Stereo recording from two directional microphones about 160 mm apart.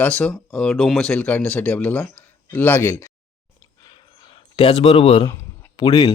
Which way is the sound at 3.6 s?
25° left (ahead or behind).